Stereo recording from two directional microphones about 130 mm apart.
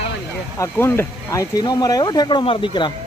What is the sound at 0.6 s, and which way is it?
Speech, 20° left (ahead or behind).